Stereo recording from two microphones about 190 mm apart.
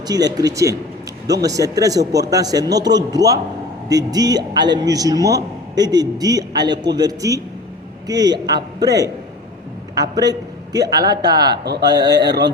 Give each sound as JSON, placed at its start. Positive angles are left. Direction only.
{"t": 0.1, "sound": "a man's voice", "side_deg": -20}
{"t": 11.5, "sound": "a man's voice", "side_deg": -60}